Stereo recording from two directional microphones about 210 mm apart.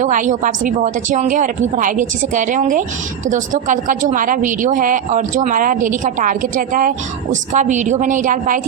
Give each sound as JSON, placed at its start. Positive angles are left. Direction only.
{"t": 0.0, "sound": "a woman's voice", "side_deg": -35}